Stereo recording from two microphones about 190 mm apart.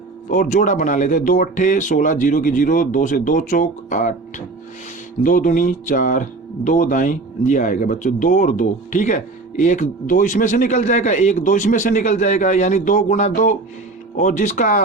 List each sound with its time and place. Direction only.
0.3 s speech: 40° left (ahead or behind)